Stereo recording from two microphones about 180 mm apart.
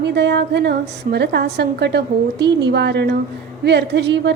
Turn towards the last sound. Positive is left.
turn(degrees=-75)  # may be behind; listen again after turning